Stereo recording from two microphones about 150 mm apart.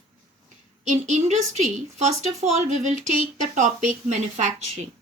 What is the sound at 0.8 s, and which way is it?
Speech, 55° right (ahead or behind).